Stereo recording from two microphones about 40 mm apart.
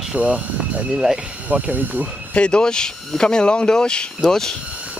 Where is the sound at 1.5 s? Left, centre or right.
Right.